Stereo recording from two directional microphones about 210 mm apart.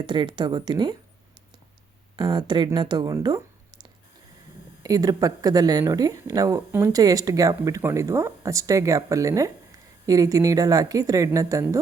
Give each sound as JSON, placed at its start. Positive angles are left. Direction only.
{"t": 0.0, "sound": "speech", "side_deg": -20}
{"t": 2.1, "sound": "speech", "side_deg": -20}
{"t": 4.8, "sound": "speech", "side_deg": -15}